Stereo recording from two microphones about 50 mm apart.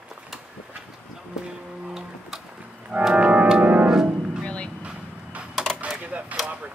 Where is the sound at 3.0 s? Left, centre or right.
Right.